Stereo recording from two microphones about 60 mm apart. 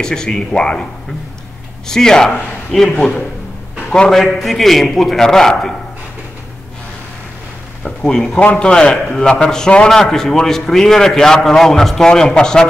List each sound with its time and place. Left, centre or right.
0.0 s a man's voice: centre
1.9 s a man's voice: centre
4.2 s a man's voice: centre
7.8 s a man's voice: centre